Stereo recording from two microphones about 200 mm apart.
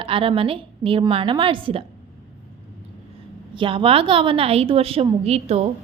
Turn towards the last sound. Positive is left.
turn(degrees=-30)  # may be behind; listen again after turning